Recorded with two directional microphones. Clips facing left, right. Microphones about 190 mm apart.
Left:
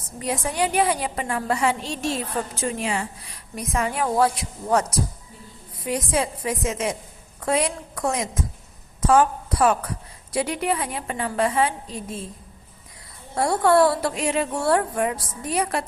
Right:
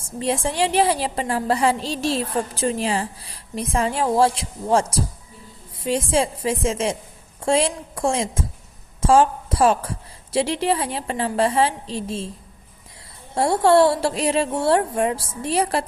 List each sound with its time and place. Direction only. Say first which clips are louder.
0.2 s a woman's voice: right 3 dB; 30° right (ahead or behind)
13.3 s a woman's voice: right 3 dB; 25° right (ahead or behind)